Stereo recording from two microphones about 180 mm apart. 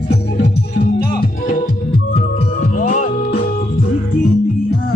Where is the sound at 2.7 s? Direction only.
45° left (ahead or behind).